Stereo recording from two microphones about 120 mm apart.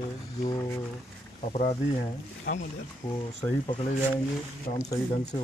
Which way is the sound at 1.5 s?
65° left (ahead or behind).